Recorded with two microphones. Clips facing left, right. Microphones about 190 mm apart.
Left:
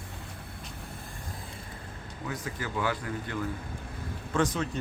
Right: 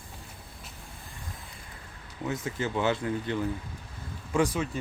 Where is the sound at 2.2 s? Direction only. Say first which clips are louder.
Right 5 dB; 25° right (ahead or behind).